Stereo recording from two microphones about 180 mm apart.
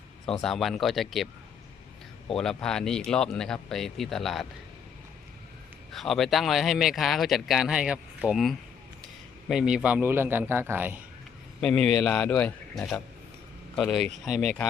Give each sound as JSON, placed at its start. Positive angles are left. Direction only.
{"t": 0.3, "sound": "speech", "side_deg": 5}
{"t": 2.3, "sound": "speech", "side_deg": 5}
{"t": 5.9, "sound": "a man's voice", "side_deg": 0}
{"t": 11.6, "sound": "speech", "side_deg": 5}